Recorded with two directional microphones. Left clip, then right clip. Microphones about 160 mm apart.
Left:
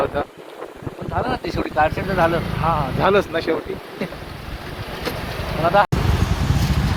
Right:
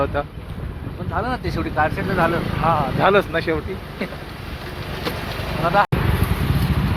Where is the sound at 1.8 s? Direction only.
60° left (ahead or behind).